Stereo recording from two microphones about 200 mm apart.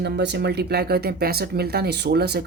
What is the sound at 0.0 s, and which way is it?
Speech, 60° right (ahead or behind).